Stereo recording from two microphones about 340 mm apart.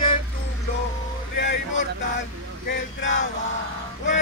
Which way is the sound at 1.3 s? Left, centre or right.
Left.